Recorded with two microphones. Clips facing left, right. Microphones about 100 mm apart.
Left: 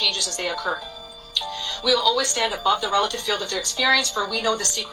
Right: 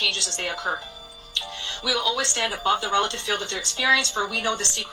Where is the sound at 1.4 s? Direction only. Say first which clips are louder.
Left 5 dB; 20° left (ahead or behind).